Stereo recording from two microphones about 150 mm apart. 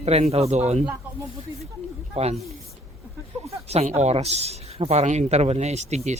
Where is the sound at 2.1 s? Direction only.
45° right (ahead or behind).